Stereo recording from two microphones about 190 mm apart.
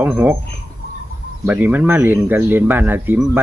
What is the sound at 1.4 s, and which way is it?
Speech, 10° right (ahead or behind).